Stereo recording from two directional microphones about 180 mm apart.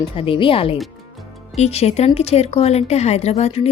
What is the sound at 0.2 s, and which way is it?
Speech, 30° left (ahead or behind).